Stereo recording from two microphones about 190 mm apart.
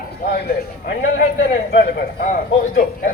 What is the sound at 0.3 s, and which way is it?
Speech, 55° left (ahead or behind).